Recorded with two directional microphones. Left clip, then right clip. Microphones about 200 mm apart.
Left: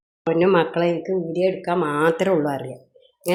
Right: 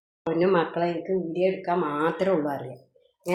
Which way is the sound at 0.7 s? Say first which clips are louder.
Left 5 dB; 50° left (ahead or behind).